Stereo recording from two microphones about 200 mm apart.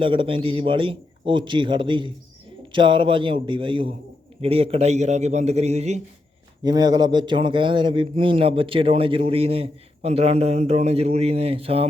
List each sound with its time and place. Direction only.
0.0 s a man's voice: 25° right (ahead or behind)
6.6 s speech: 20° right (ahead or behind)